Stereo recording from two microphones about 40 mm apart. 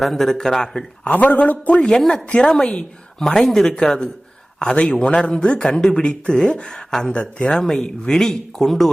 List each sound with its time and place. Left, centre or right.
0.0 s speech: centre
1.0 s a man's voice: left
2.0 s speech: centre; by 7.6 s left
7.6 s speech: centre